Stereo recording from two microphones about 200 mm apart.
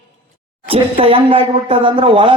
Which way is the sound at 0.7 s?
25° right (ahead or behind).